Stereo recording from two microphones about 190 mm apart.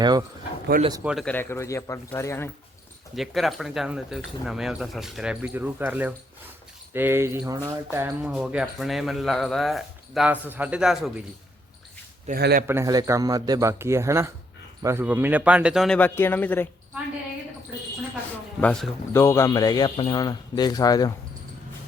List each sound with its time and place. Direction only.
0.0 s speech: 20° right (ahead or behind)
1.0 s speech: centre (ahead or behind)
1.3 s a man's voice: 10° left (ahead or behind)
3.2 s speech: centre (ahead or behind)
12.3 s speech: 50° right (ahead or behind)
12.6 s speech: 15° right (ahead or behind); by 16.6 s 10° left (ahead or behind)
18.6 s speech: 5° left (ahead or behind)
19.1 s speech: 15° left (ahead or behind)